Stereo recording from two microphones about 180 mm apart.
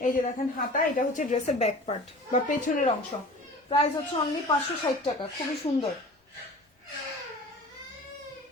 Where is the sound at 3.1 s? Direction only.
30° left (ahead or behind).